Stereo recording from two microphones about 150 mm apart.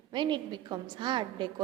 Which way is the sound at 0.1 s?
30° right (ahead or behind).